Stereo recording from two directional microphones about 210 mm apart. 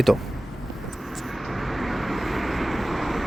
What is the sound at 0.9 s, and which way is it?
Vehicle, centre (ahead or behind).